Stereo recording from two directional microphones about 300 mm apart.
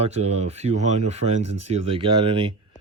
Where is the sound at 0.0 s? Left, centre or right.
Right.